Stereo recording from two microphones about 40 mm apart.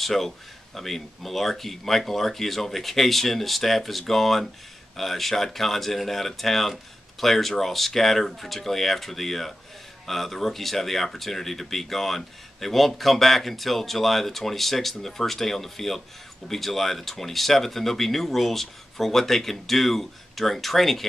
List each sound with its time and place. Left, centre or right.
0.0 s speech: centre